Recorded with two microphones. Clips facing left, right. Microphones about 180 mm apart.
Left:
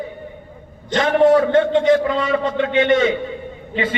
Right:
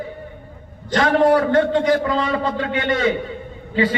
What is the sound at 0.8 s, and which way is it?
A man's voice, 20° left (ahead or behind).